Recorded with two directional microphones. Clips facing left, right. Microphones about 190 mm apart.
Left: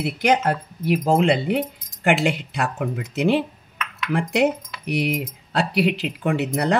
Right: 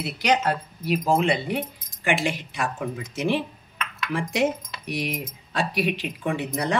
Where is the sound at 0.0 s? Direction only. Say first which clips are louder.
Left 3 dB; 50° left (ahead or behind).